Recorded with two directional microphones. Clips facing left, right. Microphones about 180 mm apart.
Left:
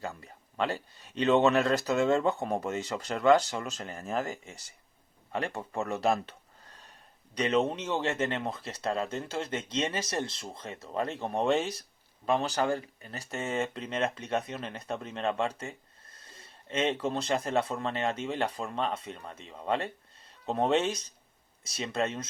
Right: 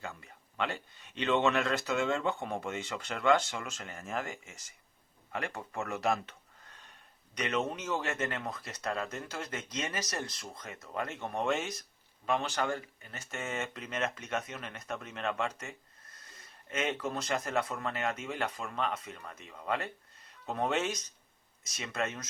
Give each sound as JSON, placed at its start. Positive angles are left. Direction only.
{"t": 0.0, "sound": "speech", "side_deg": 35}